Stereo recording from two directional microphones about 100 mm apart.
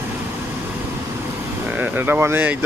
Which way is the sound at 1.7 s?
20° right (ahead or behind).